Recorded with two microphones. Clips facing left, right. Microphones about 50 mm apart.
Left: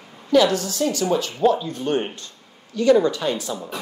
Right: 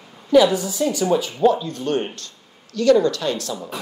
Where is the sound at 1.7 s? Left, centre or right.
Centre.